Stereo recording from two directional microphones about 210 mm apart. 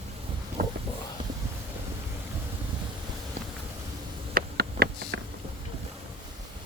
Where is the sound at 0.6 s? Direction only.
40° right (ahead or behind).